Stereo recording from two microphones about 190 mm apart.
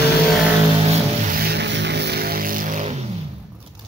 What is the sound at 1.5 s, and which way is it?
Vehicle, 65° right (ahead or behind).